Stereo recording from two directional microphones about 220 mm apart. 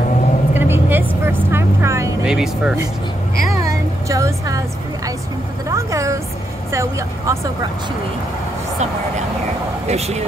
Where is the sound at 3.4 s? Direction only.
15° right (ahead or behind).